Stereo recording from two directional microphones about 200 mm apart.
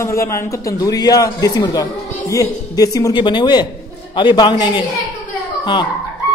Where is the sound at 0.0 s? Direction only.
15° left (ahead or behind).